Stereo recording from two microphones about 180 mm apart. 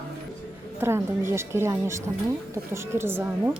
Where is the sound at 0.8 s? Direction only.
15° right (ahead or behind).